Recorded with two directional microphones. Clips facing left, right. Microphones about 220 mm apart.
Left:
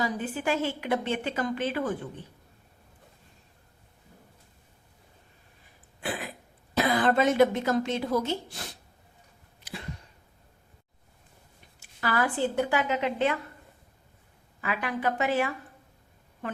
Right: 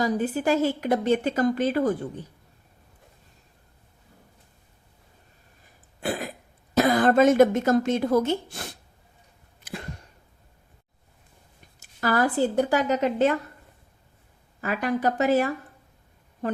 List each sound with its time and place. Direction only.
0.0 s a woman's voice: 40° right (ahead or behind)
6.0 s throat clearing: 45° right (ahead or behind)
6.7 s a woman's voice: 45° right (ahead or behind)
11.8 s a woman's voice: 40° right (ahead or behind)
14.6 s a woman's voice: 40° right (ahead or behind)